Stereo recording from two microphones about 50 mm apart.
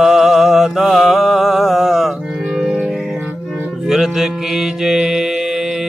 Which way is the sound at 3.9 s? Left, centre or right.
Centre.